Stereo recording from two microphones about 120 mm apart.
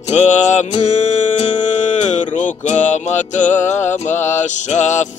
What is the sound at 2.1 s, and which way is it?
Music, 90° left.